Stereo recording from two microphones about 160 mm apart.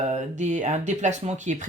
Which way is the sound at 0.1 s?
50° right (ahead or behind).